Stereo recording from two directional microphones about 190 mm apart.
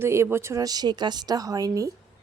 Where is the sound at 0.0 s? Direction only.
15° right (ahead or behind).